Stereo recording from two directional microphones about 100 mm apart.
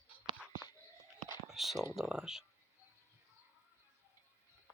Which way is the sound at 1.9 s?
5° right (ahead or behind).